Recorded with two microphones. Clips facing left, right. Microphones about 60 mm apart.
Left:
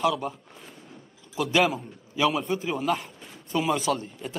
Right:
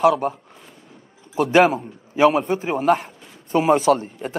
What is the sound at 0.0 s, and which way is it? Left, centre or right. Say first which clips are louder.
Speech: right 8 dB; right.